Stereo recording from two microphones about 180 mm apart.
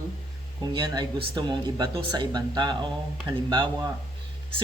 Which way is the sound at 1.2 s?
25° right (ahead or behind).